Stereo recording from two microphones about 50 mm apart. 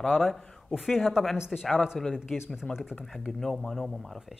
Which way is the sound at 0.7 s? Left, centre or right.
Centre.